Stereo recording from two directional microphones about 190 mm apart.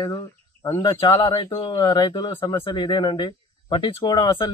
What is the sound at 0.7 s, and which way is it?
Speech, 15° left (ahead or behind).